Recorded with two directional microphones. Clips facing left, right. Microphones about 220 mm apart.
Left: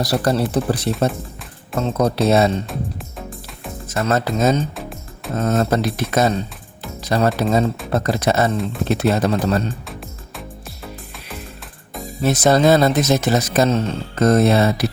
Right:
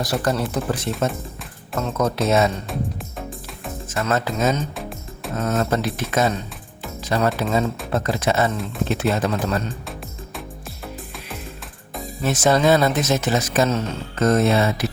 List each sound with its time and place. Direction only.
0.0 s speech: 35° left (ahead or behind)
3.2 s music: centre (ahead or behind)
4.0 s speech: 35° left (ahead or behind)
4.8 s music: centre (ahead or behind)
5.4 s speech: 35° left (ahead or behind)
12.2 s speech: 35° left (ahead or behind)